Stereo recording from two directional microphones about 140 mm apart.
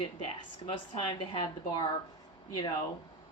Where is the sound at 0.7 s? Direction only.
40° left (ahead or behind).